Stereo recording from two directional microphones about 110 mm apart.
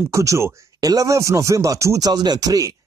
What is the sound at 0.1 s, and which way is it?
Speech, 30° right (ahead or behind).